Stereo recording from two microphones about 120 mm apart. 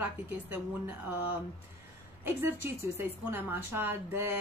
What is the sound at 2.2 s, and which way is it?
A woman's voice, 20° right (ahead or behind).